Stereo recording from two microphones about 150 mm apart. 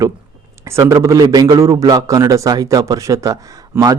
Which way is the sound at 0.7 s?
20° right (ahead or behind).